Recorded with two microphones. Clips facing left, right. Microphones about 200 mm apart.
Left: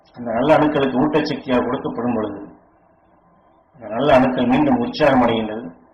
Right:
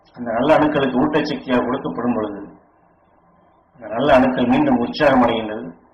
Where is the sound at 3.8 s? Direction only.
15° left (ahead or behind).